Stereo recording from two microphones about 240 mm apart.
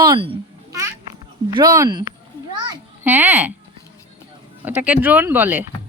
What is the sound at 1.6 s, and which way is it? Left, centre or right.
A woman's voice, centre.